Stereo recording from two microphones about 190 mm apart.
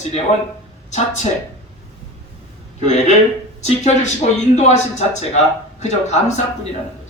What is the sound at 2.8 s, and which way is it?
Speech, 35° left (ahead or behind).